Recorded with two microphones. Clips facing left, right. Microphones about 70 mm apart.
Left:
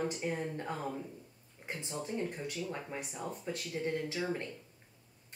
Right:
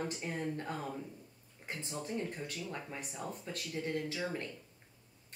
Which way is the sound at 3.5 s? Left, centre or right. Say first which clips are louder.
Left 3 dB; left.